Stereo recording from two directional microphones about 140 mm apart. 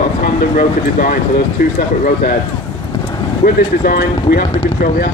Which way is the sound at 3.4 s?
90° left.